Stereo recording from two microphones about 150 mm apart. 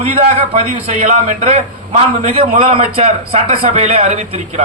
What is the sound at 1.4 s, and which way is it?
A man's voice, 45° right (ahead or behind).